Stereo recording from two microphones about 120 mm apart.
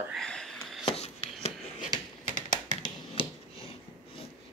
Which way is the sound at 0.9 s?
55° left (ahead or behind).